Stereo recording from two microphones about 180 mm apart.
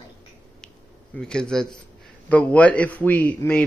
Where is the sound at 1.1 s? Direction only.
5° left (ahead or behind).